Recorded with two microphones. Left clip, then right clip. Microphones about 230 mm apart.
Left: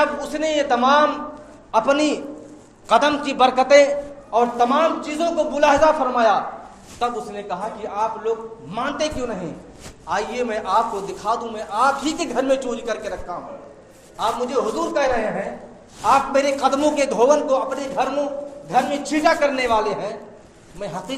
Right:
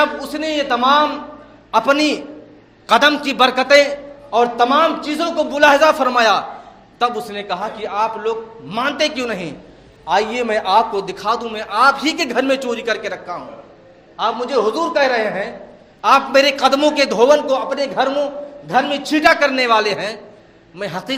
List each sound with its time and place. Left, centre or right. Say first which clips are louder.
0.0 s a man's voice: right 2 dB; right
14.2 s a man's voice: right 4 dB; right